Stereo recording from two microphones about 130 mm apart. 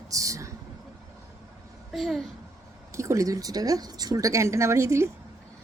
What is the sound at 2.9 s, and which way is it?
Speech, 20° right (ahead or behind).